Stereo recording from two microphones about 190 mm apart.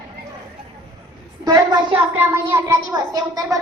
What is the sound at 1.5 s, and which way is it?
A woman's voice, 20° right (ahead or behind).